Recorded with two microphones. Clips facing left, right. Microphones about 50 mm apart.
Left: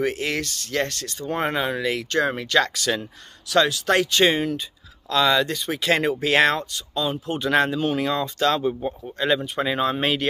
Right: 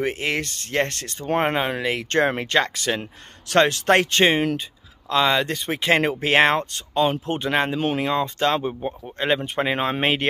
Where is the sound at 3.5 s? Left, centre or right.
Right.